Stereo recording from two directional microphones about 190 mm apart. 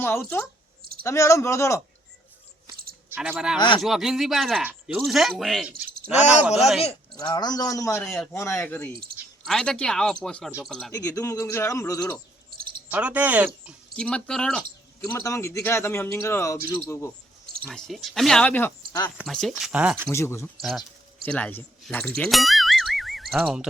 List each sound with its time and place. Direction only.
0.0 s speech: 10° left (ahead or behind)
3.2 s speech: 5° right (ahead or behind)
6.7 s a man's voice: 30° left (ahead or behind); by 8.1 s 15° left (ahead or behind)
8.1 s speech: centre (ahead or behind)
8.4 s speech: 15° left (ahead or behind)
10.9 s speech: 15° left (ahead or behind)
12.9 s speech: 10° right (ahead or behind)
13.9 s speech: 5° left (ahead or behind)
15.0 s speech: 15° left (ahead or behind)
17.6 s speech: 5° left (ahead or behind)
19.1 s speech: centre (ahead or behind)
20.1 s speech: 15° left (ahead or behind)
20.6 s speech: centre (ahead or behind)